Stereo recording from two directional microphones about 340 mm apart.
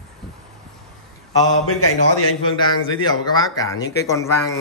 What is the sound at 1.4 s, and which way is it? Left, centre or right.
Speech, left.